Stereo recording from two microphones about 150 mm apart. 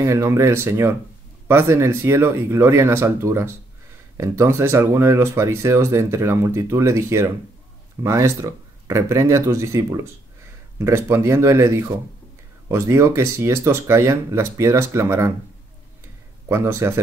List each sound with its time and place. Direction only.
0.0 s speech: 20° right (ahead or behind)
16.4 s speech: 15° right (ahead or behind)